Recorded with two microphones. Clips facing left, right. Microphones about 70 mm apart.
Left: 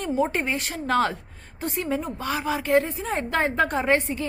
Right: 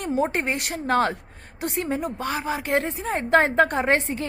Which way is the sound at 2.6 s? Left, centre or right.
Right.